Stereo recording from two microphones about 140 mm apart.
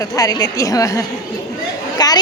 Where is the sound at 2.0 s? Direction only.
30° left (ahead or behind).